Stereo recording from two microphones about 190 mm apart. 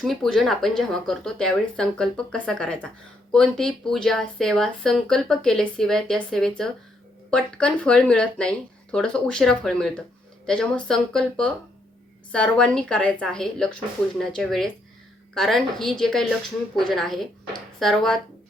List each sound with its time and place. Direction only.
0.0 s a woman's voice: centre (ahead or behind)